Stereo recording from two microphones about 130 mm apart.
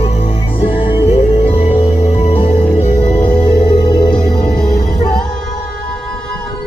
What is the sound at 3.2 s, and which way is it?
Music, 40° left (ahead or behind).